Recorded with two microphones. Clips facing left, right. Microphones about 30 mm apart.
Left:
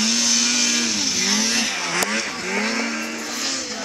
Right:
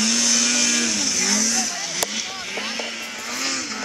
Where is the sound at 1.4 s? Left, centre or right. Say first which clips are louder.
Left 2 dB; left.